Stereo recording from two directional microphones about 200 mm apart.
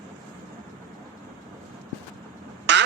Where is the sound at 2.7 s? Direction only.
60° right (ahead or behind).